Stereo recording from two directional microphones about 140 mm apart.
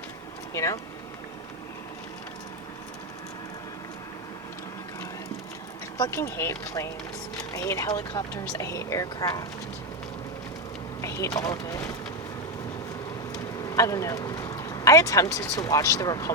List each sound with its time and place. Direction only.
0.5 s speech: 20° left (ahead or behind)
6.0 s speech: 20° left (ahead or behind)
11.0 s vehicle: 20° left (ahead or behind)
11.3 s speech: 25° left (ahead or behind)
13.7 s speech: 25° left (ahead or behind)